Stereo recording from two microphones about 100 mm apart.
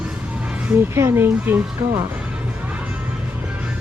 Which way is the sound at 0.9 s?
25° right (ahead or behind).